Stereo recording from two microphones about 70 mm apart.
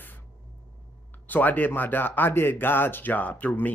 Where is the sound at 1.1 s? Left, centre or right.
Left.